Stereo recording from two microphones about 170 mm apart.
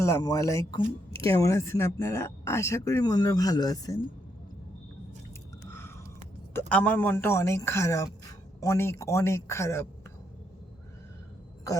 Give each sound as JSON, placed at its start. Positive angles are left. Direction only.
{"t": 0.0, "sound": "speech", "side_deg": 20}
{"t": 6.5, "sound": "a man's voice", "side_deg": 10}